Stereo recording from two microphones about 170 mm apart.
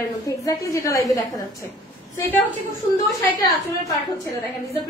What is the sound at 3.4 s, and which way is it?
Speech, 20° left (ahead or behind).